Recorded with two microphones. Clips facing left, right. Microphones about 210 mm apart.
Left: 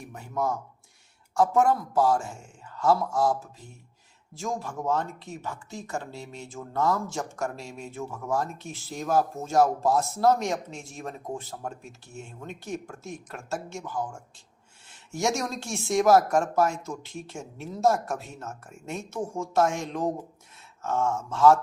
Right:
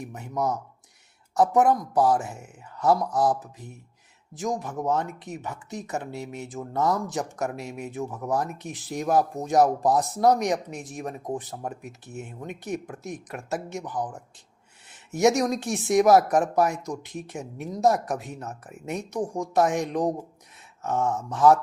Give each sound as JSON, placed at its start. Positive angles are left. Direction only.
{"t": 0.0, "sound": "speech", "side_deg": -20}